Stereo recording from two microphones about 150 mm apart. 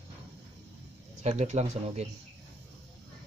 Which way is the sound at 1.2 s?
50° right (ahead or behind).